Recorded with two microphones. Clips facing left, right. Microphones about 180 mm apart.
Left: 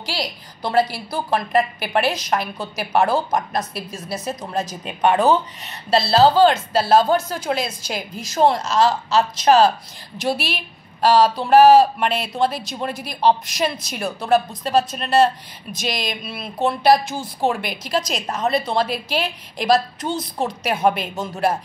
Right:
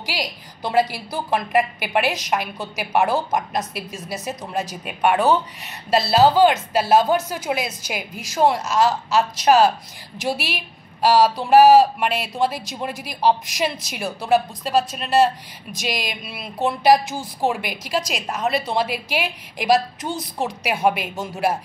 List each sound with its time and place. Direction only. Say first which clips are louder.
0.0 s speech: left 1 dB; 15° right (ahead or behind)
17.1 s a woman's voice: left 1 dB; 15° left (ahead or behind)
17.5 s speech: left 1 dB; 10° right (ahead or behind)